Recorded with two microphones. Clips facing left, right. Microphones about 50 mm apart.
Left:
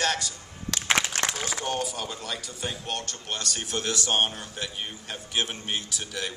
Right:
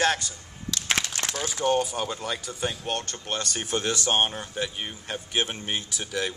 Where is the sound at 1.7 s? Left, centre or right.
Centre.